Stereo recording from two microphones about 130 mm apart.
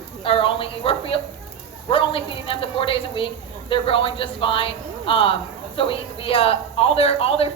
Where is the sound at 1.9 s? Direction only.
45° left (ahead or behind).